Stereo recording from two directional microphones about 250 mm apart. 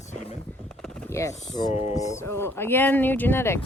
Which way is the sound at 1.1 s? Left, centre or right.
Centre.